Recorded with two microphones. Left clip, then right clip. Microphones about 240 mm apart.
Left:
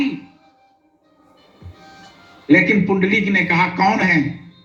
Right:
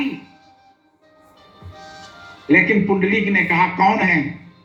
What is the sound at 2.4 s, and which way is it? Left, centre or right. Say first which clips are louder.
A man's voice: left 1 dB; left.